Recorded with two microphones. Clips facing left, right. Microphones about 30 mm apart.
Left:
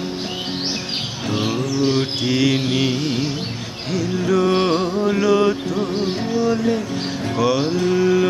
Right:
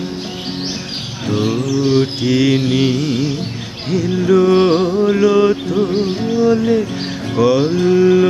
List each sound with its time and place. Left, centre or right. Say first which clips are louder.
1.3 s a sound: right 5 dB; centre
1.9 s mantra: right 5 dB; centre
3.9 s music: right 6 dB; centre